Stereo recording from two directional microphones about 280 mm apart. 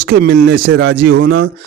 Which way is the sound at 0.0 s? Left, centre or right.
Right.